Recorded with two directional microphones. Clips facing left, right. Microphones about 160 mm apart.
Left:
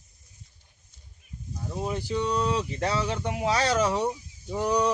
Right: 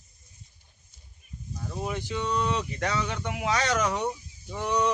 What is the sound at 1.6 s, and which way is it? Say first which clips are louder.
A man's voice: left 2 dB; 25° left (ahead or behind).